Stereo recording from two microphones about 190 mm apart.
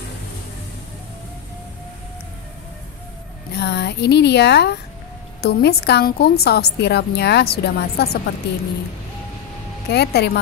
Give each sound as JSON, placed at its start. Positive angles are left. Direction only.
{"t": 3.5, "sound": "a woman's voice", "side_deg": 60}
{"t": 9.8, "sound": "a woman's voice", "side_deg": 60}